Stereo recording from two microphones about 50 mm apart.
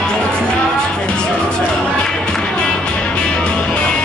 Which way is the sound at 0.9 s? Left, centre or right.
Centre.